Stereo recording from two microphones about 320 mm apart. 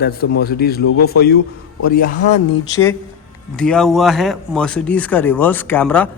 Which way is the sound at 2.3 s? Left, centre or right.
Centre.